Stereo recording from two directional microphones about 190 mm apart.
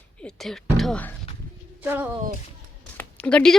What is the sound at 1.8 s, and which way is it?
Speech, 10° right (ahead or behind).